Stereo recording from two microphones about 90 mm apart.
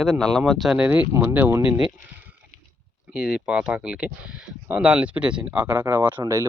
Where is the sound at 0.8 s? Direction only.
15° right (ahead or behind).